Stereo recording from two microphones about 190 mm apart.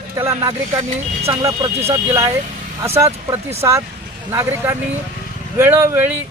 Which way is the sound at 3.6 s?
15° right (ahead or behind).